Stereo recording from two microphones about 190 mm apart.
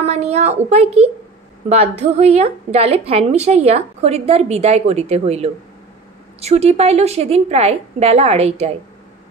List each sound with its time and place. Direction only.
0.0 s speech: 35° right (ahead or behind)